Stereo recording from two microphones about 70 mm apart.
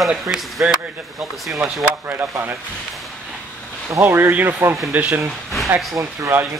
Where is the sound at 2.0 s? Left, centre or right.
Right.